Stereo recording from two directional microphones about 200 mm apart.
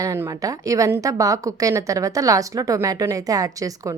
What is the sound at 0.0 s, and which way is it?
A woman's voice, 15° right (ahead or behind).